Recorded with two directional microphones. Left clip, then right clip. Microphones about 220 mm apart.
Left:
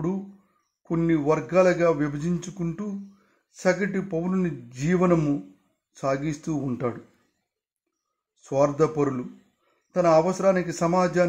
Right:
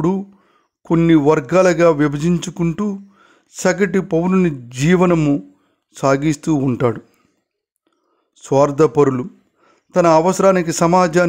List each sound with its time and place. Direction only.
0.8 s a man's voice: 45° right (ahead or behind)
8.4 s a man's voice: 45° right (ahead or behind)